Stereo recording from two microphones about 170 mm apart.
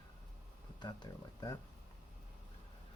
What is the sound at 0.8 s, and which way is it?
Speech, 25° left (ahead or behind).